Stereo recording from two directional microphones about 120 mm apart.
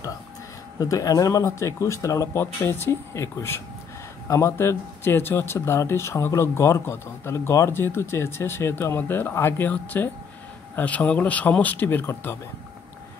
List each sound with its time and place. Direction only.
0.7 s speech: 30° left (ahead or behind)